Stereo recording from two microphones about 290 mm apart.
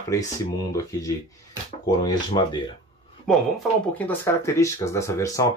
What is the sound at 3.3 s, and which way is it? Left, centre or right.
Speech, centre.